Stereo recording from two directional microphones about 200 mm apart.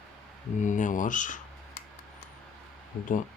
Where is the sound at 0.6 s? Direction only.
40° left (ahead or behind).